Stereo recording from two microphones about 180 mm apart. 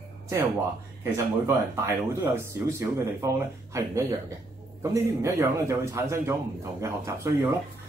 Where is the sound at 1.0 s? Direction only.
15° right (ahead or behind).